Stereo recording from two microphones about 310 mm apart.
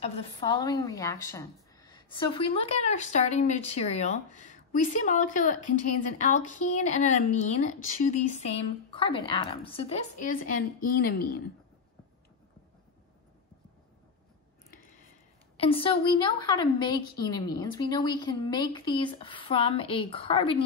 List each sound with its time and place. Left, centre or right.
0.0 s a woman's voice: centre
15.5 s a woman's voice: centre